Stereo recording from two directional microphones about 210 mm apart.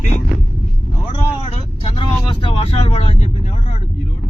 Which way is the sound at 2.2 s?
25° left (ahead or behind).